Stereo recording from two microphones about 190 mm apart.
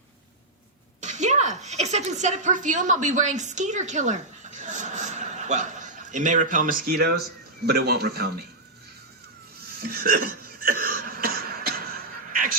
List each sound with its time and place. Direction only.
1.0 s a woman's voice: 40° right (ahead or behind); by 8.4 s 55° right (ahead or behind)
9.7 s cough: 50° right (ahead or behind)